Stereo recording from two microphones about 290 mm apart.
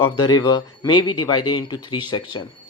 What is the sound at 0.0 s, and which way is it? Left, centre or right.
Speech, centre.